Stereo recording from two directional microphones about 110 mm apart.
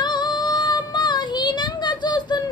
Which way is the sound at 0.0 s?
45° left (ahead or behind).